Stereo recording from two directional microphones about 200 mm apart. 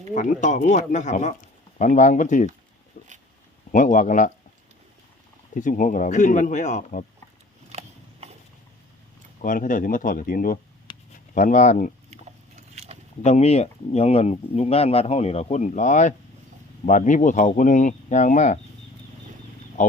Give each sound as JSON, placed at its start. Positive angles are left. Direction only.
{"t": 0.1, "sound": "speech", "side_deg": 40}
{"t": 5.5, "sound": "speech", "side_deg": 40}
{"t": 7.7, "sound": "a sound", "side_deg": -30}
{"t": 9.4, "sound": "speech", "side_deg": 45}
{"t": 12.1, "sound": "biting", "side_deg": -30}
{"t": 13.2, "sound": "speech", "side_deg": 30}